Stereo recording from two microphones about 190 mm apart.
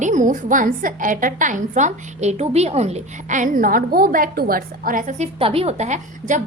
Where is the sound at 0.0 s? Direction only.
40° right (ahead or behind).